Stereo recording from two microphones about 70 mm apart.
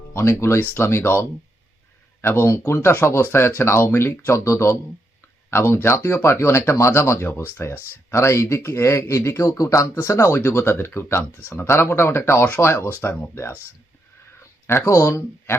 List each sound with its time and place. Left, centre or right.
0.1 s speech: left
14.7 s speech: left